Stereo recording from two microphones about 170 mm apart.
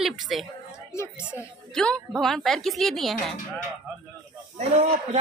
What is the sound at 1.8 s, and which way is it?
A woman's voice, 5° left (ahead or behind).